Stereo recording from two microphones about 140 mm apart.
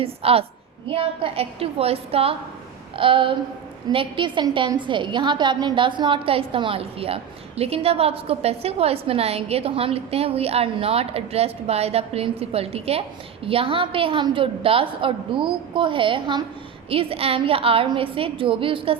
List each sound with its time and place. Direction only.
0.0 s a woman's voice: 45° right (ahead or behind)